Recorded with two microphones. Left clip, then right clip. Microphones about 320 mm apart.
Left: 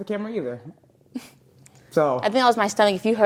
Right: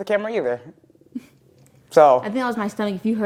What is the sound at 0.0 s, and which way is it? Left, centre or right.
Speech, right.